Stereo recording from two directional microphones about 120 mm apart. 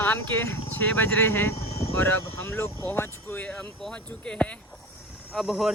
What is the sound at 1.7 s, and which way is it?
Speech, 55° left (ahead or behind).